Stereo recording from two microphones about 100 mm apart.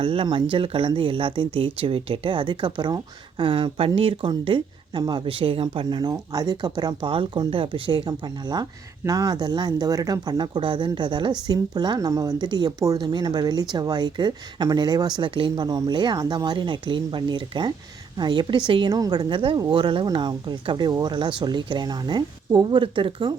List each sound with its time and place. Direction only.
0.0 s speech: 65° right (ahead or behind)
4.4 s speech: 55° right (ahead or behind)
9.0 s a woman's voice: 35° right (ahead or behind)
19.3 s speech: 60° right (ahead or behind)
19.5 s speech: 45° right (ahead or behind)